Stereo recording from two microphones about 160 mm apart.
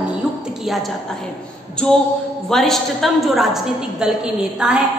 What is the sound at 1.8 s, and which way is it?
A woman's voice, 5° left (ahead or behind).